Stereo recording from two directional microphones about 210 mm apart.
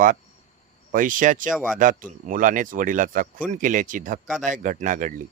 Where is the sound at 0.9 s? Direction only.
40° right (ahead or behind).